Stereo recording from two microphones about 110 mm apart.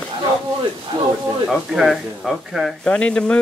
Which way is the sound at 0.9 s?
40° right (ahead or behind).